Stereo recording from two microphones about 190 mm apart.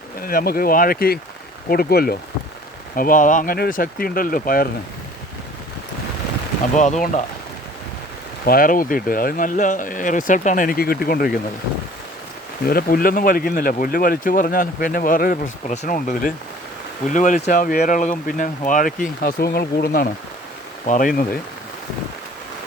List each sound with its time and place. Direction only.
0.2 s speech: 50° left (ahead or behind)
6.7 s speech: 40° left (ahead or behind)
8.4 s speech: 50° left (ahead or behind)
12.6 s speech: 50° left (ahead or behind)